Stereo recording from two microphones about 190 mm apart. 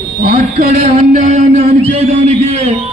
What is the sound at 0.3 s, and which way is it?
A man's voice, 35° right (ahead or behind).